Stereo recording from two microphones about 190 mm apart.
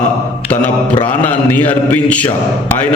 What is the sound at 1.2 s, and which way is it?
A man's voice, 10° left (ahead or behind).